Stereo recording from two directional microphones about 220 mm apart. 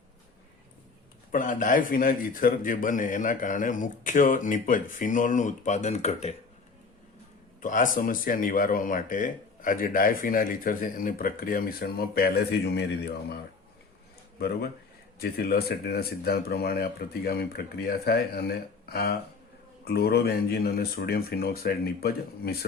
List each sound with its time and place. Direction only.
1.3 s speech: 35° left (ahead or behind)
7.6 s speech: 35° left (ahead or behind)